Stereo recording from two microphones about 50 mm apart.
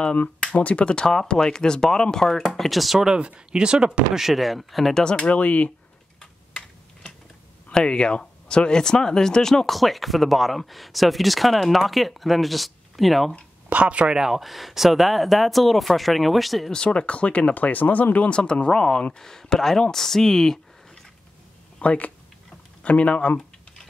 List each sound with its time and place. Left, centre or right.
0.6 s speech: left; by 3.1 s centre
3.1 s speech: centre
4.2 s speech: centre
4.9 s speech: centre
5.2 s speech: left
7.7 s speech: centre
13.7 s speech: right
14.1 s speech: centre
16.7 s speech: left
18.3 s speech: centre
21.7 s speech: left